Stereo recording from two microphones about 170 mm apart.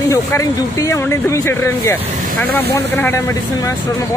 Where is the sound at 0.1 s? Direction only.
20° left (ahead or behind).